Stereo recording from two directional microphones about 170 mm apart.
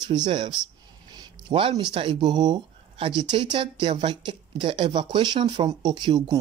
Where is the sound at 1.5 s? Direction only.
30° right (ahead or behind).